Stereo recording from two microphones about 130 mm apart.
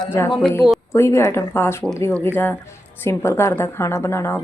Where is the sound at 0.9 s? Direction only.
20° left (ahead or behind).